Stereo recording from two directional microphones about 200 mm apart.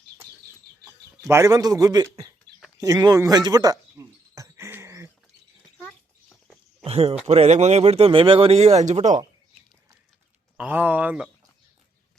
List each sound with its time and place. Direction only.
0.3 s chicken: 55° right (ahead or behind)
1.3 s a man's voice: 15° right (ahead or behind)
2.7 s a sound: 15° right (ahead or behind)
6.8 s speech: 30° right (ahead or behind)
10.6 s a man's voice: 10° right (ahead or behind)